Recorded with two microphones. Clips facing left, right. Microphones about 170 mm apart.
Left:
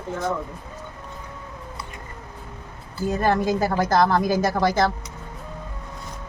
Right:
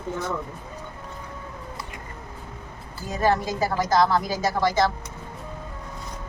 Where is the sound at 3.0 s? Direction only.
55° left (ahead or behind).